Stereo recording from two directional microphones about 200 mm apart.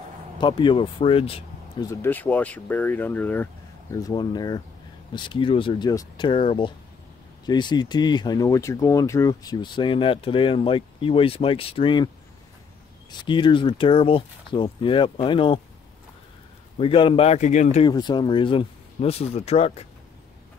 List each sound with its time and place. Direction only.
0.4 s speech: 25° left (ahead or behind)
1.8 s speech: 15° left (ahead or behind)
13.2 s speech: 25° left (ahead or behind)
16.7 s a man's voice: 25° left (ahead or behind)
17.8 s speech: 20° left (ahead or behind)